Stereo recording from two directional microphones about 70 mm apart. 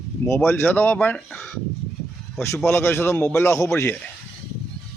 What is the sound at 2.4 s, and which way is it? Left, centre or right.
Speech, left.